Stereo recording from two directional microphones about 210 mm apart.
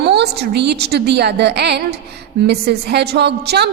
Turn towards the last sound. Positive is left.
turn(degrees=-50)  # may be behind; listen again after turning